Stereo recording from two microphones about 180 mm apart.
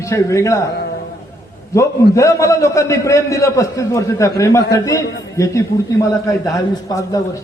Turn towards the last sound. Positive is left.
turn(degrees=20)  # may be behind; listen again after turning